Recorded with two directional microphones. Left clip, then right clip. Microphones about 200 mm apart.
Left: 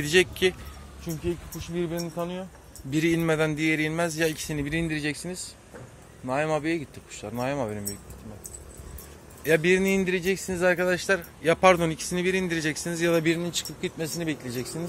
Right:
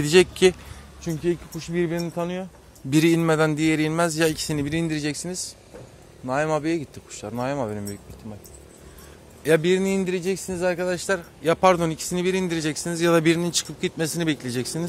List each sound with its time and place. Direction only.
0.0 s a man's voice: 30° right (ahead or behind)
1.0 s speech: 55° right (ahead or behind)
2.9 s a man's voice: 35° right (ahead or behind)
6.2 s a man's voice: 25° right (ahead or behind)
9.4 s a man's voice: 30° right (ahead or behind)
10.5 s a man's voice: 10° right (ahead or behind); by 14.9 s 50° right (ahead or behind)